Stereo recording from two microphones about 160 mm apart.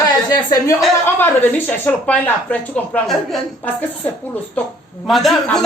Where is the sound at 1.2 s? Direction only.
10° left (ahead or behind).